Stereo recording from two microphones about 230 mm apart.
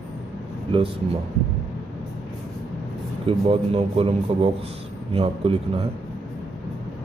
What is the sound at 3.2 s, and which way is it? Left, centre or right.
Speech, right.